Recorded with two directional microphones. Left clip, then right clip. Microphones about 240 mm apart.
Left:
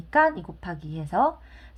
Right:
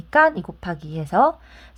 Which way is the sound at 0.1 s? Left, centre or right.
Right.